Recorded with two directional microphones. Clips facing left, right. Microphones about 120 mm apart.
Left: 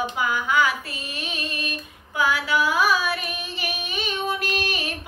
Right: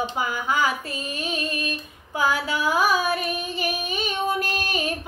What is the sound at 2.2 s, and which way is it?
Child singing, 40° right (ahead or behind).